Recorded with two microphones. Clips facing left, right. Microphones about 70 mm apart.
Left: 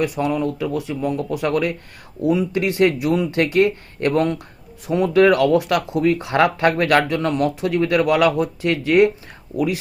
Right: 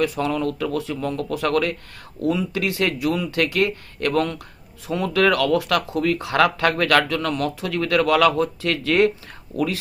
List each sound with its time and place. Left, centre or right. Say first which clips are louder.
0.0 s speech: left 1 dB; centre